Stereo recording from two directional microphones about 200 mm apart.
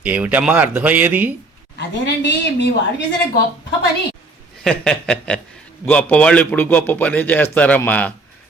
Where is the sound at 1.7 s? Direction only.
60° left (ahead or behind).